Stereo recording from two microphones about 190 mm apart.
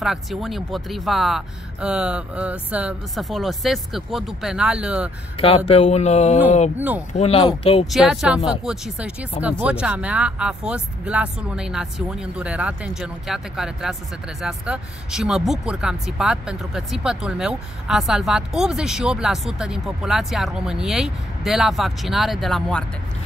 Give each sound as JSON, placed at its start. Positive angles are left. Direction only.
{"t": 0.0, "sound": "speech", "side_deg": 0}
{"t": 5.7, "sound": "a sound", "side_deg": 35}
{"t": 7.8, "sound": "speech", "side_deg": 0}